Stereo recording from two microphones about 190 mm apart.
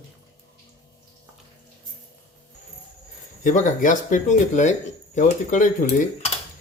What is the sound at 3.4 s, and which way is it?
Speech, 45° left (ahead or behind).